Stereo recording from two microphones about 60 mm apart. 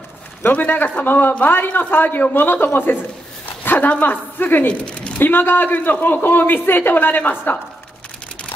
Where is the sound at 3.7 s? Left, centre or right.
Left.